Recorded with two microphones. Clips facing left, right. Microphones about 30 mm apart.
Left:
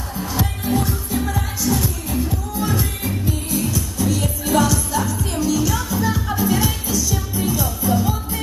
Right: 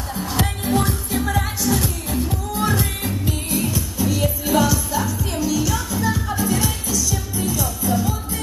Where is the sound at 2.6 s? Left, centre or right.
Right.